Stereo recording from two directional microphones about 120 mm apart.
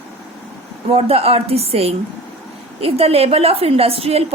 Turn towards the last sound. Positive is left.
turn(degrees=-55)  # may be behind; listen again after turning